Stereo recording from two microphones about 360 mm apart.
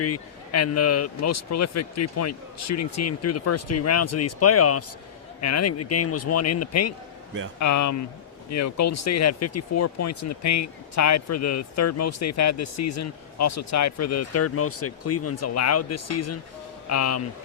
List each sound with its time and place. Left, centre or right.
0.0 s speech: left